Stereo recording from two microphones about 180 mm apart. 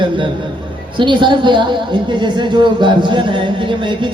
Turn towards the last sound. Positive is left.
turn(degrees=-25)  # may be behind; listen again after turning